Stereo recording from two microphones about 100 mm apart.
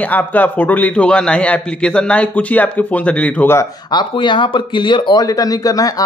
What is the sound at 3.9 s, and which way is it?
Speech, 50° left (ahead or behind).